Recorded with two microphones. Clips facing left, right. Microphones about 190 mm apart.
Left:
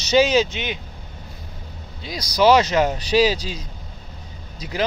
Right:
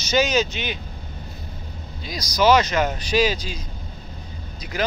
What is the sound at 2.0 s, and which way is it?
Speech, 30° left (ahead or behind).